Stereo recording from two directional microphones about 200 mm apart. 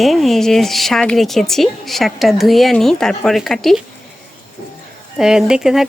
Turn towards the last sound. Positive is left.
turn(degrees=-5)  # may be behind; listen again after turning